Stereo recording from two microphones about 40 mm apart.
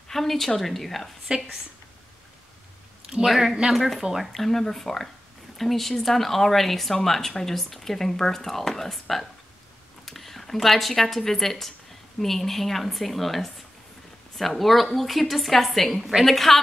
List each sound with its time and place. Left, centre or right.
0.1 s a woman's voice: centre
1.2 s a woman's voice: centre
3.3 s a woman's voice: centre
4.0 s speech: centre
4.3 s a woman's voice: centre